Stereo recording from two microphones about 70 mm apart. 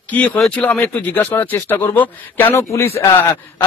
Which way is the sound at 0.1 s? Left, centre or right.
Left.